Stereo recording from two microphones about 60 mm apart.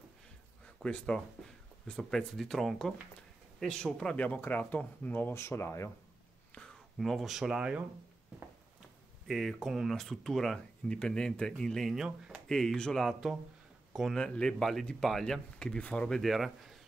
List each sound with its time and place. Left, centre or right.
0.8 s speech: centre
4.4 s speech: left
5.3 s speech: left
7.0 s speech: centre
9.3 s speech: centre
10.9 s speech: centre
14.1 s speech: centre
15.8 s speech: left
16.1 s speech: centre